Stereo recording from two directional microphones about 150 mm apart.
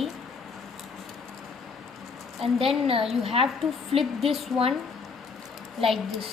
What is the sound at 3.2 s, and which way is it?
Speech, 40° right (ahead or behind).